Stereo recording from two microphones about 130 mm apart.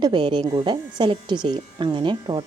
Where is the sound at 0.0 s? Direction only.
40° right (ahead or behind).